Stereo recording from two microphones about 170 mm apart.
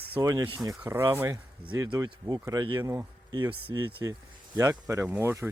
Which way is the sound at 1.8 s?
25° right (ahead or behind).